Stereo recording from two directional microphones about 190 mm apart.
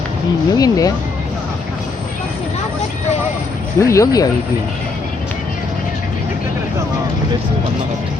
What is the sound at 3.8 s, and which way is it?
Speech, 15° left (ahead or behind).